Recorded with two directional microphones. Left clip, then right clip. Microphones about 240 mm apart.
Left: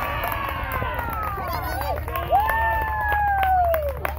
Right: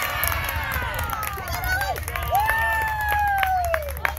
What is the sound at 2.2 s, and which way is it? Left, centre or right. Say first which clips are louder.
Crowd: left 1 dB; right.